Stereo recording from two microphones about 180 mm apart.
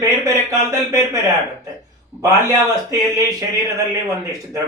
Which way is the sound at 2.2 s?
15° right (ahead or behind).